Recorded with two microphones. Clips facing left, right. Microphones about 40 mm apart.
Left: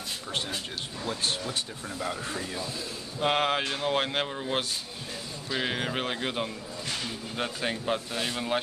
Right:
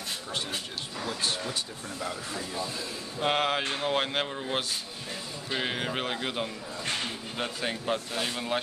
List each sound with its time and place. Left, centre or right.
2.0 s speech: left
3.2 s speech: centre